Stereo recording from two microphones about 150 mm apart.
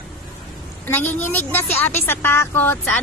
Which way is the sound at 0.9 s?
15° left (ahead or behind).